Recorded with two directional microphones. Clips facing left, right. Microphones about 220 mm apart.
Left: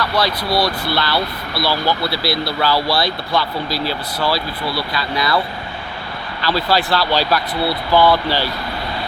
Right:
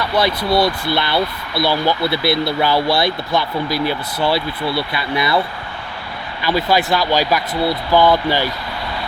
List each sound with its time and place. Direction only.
0.5 s speech: 20° right (ahead or behind)
6.4 s speech: 15° right (ahead or behind)